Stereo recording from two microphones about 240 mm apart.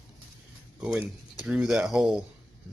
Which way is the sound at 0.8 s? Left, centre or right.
Centre.